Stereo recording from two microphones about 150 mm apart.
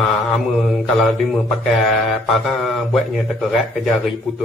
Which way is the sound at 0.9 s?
Centre (ahead or behind).